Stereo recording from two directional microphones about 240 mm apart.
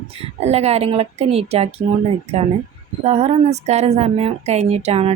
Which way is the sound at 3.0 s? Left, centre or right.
Right.